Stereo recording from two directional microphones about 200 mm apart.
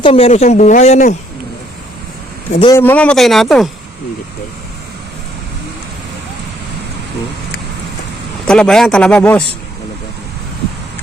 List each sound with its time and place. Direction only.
0.0 s speech: 30° left (ahead or behind)
2.5 s speech: 30° left (ahead or behind)
2.7 s speech: 10° left (ahead or behind)
8.4 s speech: 5° left (ahead or behind)